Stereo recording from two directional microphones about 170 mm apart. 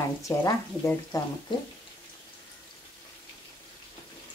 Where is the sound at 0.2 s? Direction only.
20° left (ahead or behind).